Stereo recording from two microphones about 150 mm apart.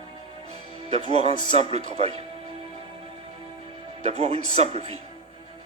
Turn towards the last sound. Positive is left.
turn(degrees=-45)  # may be behind; listen again after turning